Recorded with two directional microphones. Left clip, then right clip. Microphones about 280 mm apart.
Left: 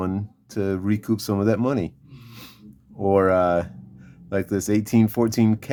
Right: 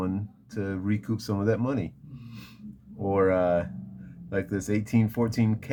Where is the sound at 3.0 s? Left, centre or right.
Left.